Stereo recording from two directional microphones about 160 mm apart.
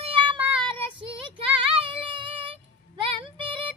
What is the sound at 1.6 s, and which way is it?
Child singing, 35° right (ahead or behind).